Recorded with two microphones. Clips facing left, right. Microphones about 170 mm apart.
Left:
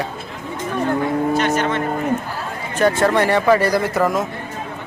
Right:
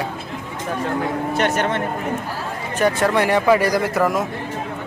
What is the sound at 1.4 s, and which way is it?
Speech, 60° right (ahead or behind).